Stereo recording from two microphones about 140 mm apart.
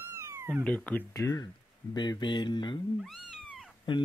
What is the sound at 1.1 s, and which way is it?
Speech, 25° left (ahead or behind).